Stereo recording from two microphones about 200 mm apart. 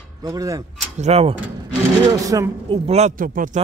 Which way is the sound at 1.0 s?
30° right (ahead or behind).